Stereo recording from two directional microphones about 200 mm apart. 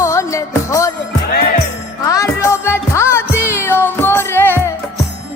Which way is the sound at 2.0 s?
15° left (ahead or behind).